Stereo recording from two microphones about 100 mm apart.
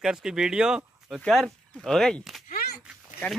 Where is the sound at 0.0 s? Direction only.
5° right (ahead or behind).